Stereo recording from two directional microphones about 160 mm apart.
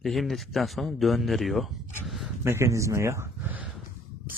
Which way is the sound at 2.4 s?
15° right (ahead or behind).